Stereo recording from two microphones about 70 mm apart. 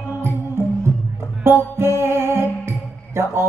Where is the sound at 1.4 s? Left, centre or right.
Right.